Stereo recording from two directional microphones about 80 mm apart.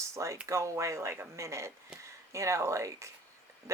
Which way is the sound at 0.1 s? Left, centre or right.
Right.